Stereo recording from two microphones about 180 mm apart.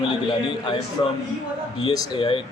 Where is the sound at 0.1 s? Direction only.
25° left (ahead or behind).